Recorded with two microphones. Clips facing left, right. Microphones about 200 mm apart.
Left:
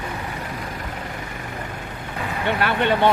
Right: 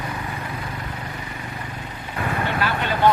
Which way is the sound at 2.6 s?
65° left (ahead or behind).